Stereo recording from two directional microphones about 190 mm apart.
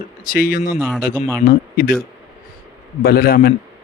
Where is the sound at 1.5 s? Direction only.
50° left (ahead or behind).